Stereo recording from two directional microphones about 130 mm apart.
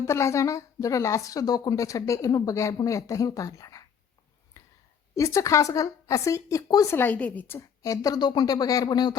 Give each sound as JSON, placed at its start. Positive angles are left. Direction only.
{"t": 0.0, "sound": "a woman's voice", "side_deg": 20}
{"t": 4.6, "sound": "a sound", "side_deg": 25}
{"t": 5.1, "sound": "a woman's voice", "side_deg": 25}
{"t": 6.9, "sound": "a woman's voice", "side_deg": 15}